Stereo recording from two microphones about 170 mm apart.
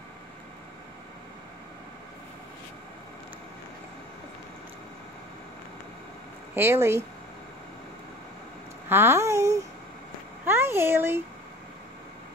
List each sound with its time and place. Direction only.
6.5 s speech: 15° right (ahead or behind)
8.8 s speech: 15° right (ahead or behind)